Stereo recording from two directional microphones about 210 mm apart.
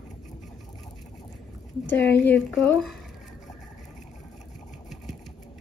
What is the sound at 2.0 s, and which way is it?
Speech, 55° left (ahead or behind).